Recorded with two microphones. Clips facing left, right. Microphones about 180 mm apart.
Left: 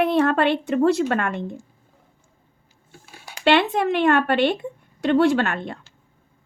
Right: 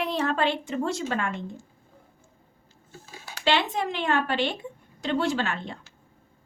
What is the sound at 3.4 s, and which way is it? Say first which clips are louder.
Speech: left 7 dB; 60° left (ahead or behind).